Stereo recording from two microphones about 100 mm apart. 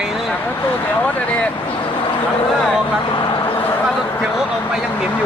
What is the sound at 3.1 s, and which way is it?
Vehicle, 50° left (ahead or behind).